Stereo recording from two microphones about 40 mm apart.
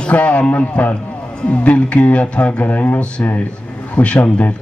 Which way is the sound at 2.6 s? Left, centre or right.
Left.